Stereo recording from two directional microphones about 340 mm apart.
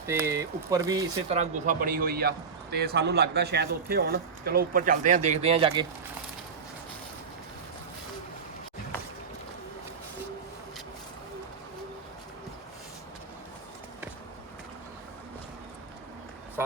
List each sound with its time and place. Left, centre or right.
0.0 s speech: centre